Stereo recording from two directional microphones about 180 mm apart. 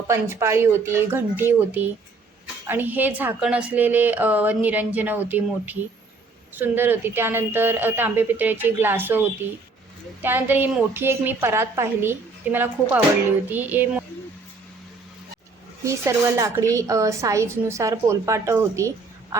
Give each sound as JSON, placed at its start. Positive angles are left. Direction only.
{"t": 0.1, "sound": "a woman's voice", "side_deg": -15}
{"t": 15.8, "sound": "a woman's voice", "side_deg": -15}